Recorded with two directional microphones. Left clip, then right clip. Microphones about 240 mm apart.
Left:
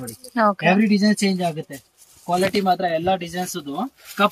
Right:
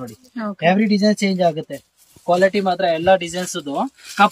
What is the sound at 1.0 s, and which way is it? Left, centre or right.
Speech, right.